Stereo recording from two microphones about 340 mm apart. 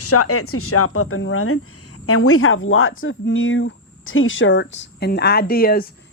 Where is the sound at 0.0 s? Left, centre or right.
Left.